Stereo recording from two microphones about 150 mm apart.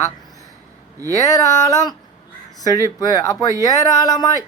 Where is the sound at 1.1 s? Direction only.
20° left (ahead or behind).